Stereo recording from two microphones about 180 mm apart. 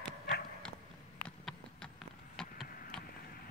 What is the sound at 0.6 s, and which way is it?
Clip-clop, 5° left (ahead or behind).